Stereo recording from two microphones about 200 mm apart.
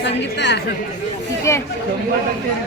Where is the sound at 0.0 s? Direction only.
60° left (ahead or behind).